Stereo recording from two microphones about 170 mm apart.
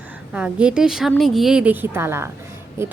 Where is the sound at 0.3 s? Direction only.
5° right (ahead or behind).